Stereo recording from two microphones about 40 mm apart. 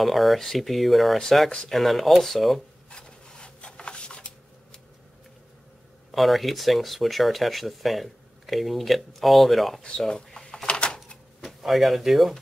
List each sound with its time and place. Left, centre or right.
0.0 s speech: centre
2.9 s a sound: centre
6.1 s speech: centre
9.9 s a sound: centre
10.7 s typewriter: left
11.4 s speech: centre